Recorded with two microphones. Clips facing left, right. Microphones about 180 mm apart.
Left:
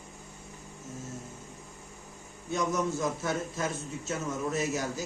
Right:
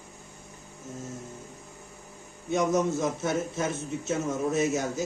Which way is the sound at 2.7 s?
20° right (ahead or behind).